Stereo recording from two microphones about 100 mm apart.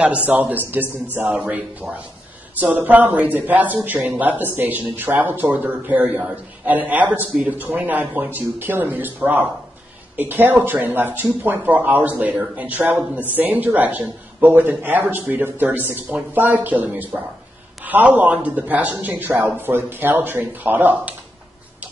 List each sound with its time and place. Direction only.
0.3 s a man's voice: 20° right (ahead or behind)